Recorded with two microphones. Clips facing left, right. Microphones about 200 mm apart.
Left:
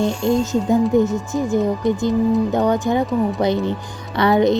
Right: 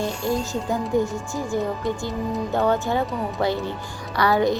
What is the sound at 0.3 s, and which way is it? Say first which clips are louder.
Speech: left 8 dB; 20° left (ahead or behind).